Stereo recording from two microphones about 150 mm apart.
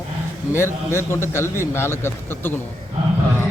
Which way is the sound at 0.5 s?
15° left (ahead or behind).